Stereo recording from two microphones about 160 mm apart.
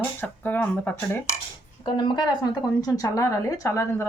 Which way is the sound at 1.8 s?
30° left (ahead or behind).